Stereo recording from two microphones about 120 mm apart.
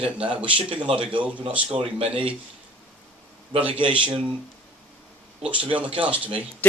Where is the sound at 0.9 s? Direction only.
45° right (ahead or behind).